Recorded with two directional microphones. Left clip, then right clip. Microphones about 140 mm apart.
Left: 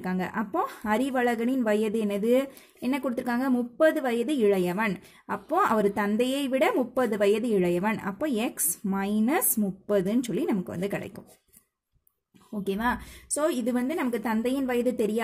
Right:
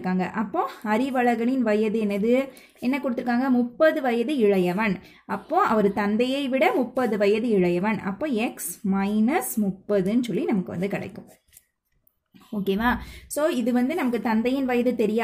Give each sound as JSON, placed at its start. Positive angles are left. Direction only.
{"t": 0.0, "sound": "speech", "side_deg": 45}
{"t": 12.5, "sound": "a woman's voice", "side_deg": 30}